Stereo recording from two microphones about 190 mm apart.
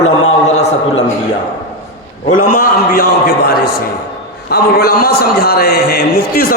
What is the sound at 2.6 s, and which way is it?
A man's voice, 50° left (ahead or behind).